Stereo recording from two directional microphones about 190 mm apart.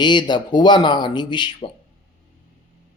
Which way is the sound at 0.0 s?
25° left (ahead or behind).